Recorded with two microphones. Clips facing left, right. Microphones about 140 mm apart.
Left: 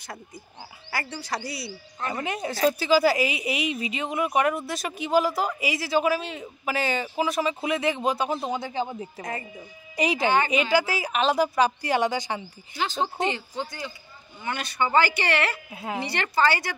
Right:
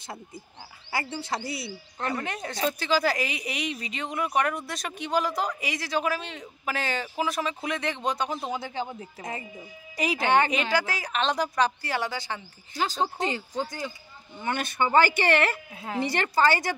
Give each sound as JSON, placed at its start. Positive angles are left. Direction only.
{"t": 1.1, "sound": "speech", "side_deg": -25}
{"t": 2.0, "sound": "a woman's voice", "side_deg": 10}
{"t": 9.2, "sound": "speech", "side_deg": -15}
{"t": 10.2, "sound": "speech", "side_deg": -65}
{"t": 10.5, "sound": "a woman's voice", "side_deg": 5}
{"t": 12.7, "sound": "speech", "side_deg": -40}
{"t": 15.7, "sound": "a woman's voice", "side_deg": 5}
{"t": 16.1, "sound": "speech", "side_deg": -45}